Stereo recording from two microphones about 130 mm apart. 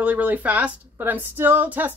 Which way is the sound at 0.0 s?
10° right (ahead or behind).